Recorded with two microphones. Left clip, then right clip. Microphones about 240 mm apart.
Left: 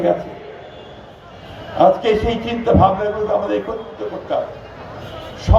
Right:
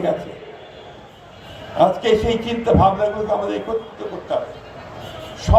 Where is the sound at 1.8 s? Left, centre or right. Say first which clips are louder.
Left 2 dB; right.